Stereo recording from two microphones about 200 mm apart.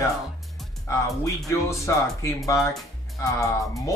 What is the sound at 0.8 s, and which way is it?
Speech, 15° left (ahead or behind).